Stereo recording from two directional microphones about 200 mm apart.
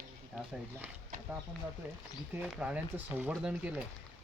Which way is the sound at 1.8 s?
5° right (ahead or behind).